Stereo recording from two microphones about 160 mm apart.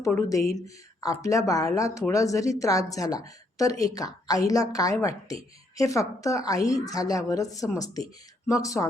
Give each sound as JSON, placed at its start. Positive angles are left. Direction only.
{"t": 0.0, "sound": "speech", "side_deg": 20}